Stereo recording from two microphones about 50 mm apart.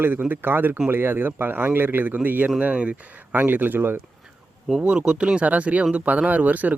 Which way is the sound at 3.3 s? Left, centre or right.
Right.